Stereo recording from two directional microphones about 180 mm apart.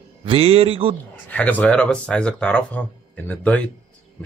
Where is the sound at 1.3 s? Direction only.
10° left (ahead or behind).